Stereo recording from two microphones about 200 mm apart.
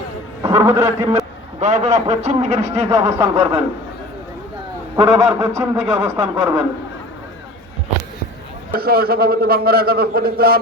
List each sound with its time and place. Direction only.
0.4 s a man's voice: 15° right (ahead or behind)
1.5 s a man's voice: 35° right (ahead or behind)
2.9 s a man's voice: 15° right (ahead or behind)
4.9 s a man's voice: 15° right (ahead or behind)
8.8 s a man's voice: 50° right (ahead or behind)